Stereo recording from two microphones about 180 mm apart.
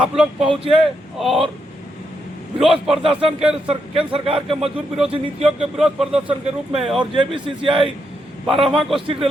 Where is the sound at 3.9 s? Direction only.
30° right (ahead or behind).